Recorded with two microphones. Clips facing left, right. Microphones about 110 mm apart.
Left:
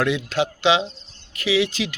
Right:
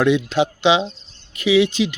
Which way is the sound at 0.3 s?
20° right (ahead or behind).